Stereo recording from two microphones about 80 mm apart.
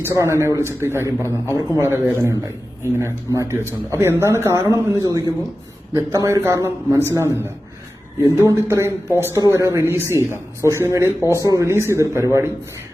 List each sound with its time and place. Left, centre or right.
0.0 s a man's voice: right
1.2 s a man's voice: left
1.8 s a man's voice: right